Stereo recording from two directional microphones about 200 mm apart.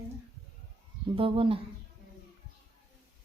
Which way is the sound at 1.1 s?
25° right (ahead or behind).